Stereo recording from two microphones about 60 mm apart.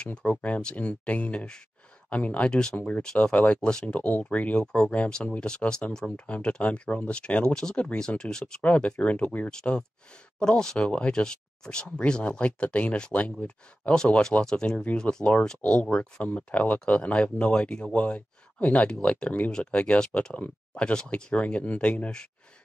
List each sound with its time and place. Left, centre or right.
0.0 s speech: left
5.9 s speech: centre
6.2 s speech: left
8.6 s speech: left
9.5 s speech: centre
13.9 s speech: centre